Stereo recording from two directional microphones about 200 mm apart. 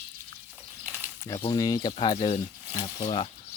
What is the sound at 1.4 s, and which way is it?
Speech, 20° left (ahead or behind).